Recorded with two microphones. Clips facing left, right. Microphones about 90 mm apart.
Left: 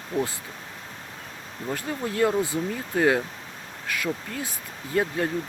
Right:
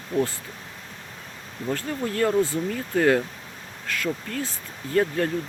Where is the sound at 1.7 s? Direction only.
15° left (ahead or behind).